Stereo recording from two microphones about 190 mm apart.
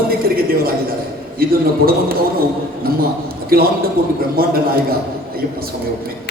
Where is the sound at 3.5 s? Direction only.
50° right (ahead or behind).